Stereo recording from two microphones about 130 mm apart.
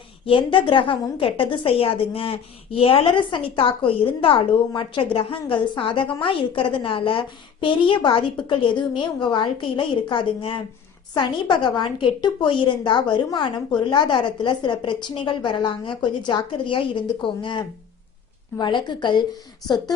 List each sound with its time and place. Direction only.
0.3 s a woman's voice: 40° left (ahead or behind)